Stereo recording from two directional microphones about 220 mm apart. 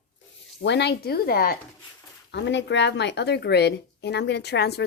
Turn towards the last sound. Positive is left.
turn(degrees=50)  # may be behind; listen again after turning